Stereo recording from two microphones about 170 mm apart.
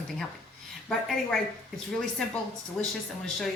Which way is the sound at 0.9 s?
Centre (ahead or behind).